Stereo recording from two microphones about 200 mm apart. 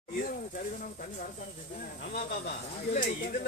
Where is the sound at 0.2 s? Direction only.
45° left (ahead or behind).